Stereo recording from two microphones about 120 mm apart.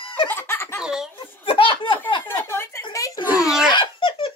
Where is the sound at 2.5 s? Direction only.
25° left (ahead or behind).